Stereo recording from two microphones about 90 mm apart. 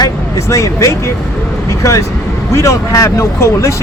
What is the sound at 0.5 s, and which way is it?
Speech, 35° left (ahead or behind).